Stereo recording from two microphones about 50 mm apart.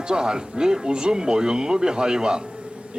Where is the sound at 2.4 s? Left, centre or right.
Right.